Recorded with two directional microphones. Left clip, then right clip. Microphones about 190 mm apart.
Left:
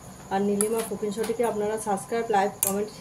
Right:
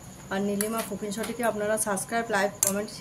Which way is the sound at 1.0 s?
55° right (ahead or behind).